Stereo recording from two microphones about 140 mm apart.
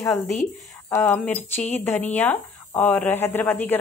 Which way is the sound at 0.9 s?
15° left (ahead or behind).